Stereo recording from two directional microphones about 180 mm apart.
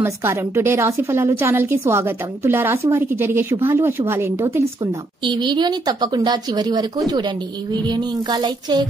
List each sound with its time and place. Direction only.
0.0 s a woman's voice: 15° right (ahead or behind)
5.2 s speech: 25° right (ahead or behind)